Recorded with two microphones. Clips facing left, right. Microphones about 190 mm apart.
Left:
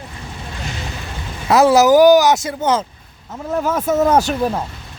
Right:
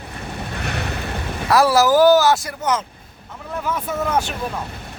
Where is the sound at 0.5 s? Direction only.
65° right (ahead or behind).